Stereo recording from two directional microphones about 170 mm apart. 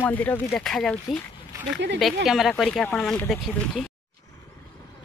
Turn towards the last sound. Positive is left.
turn(degrees=0)  # may be behind; listen again after turning